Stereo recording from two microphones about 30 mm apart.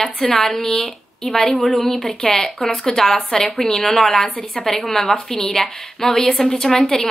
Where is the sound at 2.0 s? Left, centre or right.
Centre.